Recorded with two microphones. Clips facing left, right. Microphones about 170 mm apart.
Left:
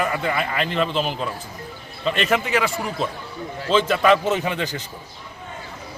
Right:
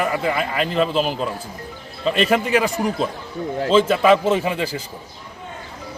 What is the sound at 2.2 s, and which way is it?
Speech, 35° right (ahead or behind).